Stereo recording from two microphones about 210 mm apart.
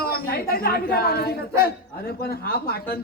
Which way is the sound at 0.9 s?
45° left (ahead or behind).